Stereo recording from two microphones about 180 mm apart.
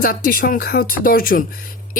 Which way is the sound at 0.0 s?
55° left (ahead or behind).